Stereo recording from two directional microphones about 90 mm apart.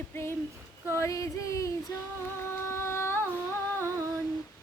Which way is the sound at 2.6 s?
30° left (ahead or behind).